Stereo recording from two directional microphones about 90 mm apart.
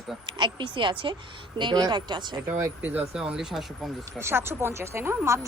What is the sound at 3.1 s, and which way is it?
Speech, 5° right (ahead or behind).